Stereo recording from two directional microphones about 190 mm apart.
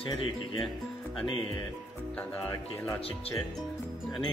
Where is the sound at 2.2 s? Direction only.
15° left (ahead or behind).